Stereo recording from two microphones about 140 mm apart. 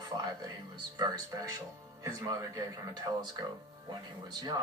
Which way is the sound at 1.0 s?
25° right (ahead or behind).